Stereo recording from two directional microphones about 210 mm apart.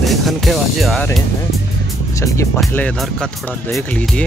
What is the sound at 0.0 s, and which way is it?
Speech, centre (ahead or behind).